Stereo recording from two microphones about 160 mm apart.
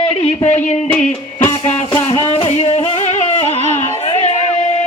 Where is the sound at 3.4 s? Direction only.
45° right (ahead or behind).